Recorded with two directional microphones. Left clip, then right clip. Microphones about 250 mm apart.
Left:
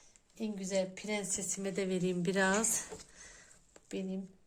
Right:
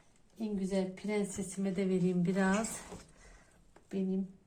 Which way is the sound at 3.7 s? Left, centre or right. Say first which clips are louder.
Right 3 dB; left.